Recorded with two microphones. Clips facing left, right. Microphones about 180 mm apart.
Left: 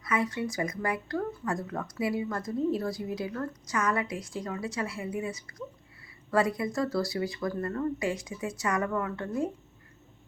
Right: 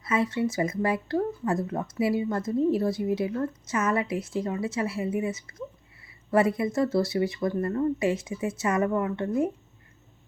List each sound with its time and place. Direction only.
0.0 s a woman's voice: 25° right (ahead or behind)